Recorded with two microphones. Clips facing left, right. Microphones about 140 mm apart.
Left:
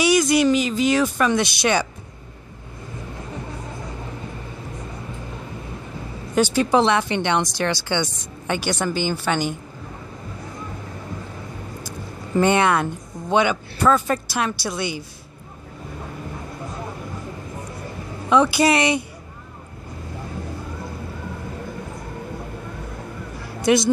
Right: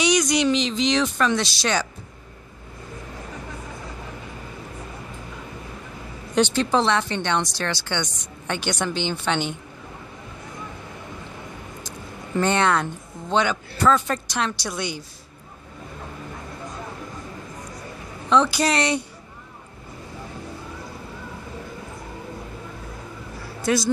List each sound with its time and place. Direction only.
0.0 s a woman's voice: 5° left (ahead or behind)
6.3 s speech: 10° left (ahead or behind)
12.4 s speech: 10° left (ahead or behind)
18.6 s speech: 10° left (ahead or behind)
23.6 s a woman's voice: 20° left (ahead or behind)